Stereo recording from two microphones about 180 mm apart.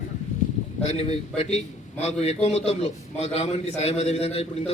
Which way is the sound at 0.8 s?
35° left (ahead or behind).